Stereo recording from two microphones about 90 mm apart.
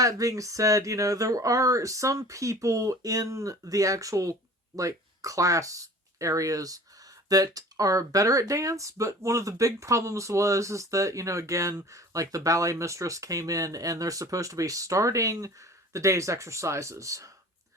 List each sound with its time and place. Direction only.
0.0 s speech: 40° right (ahead or behind)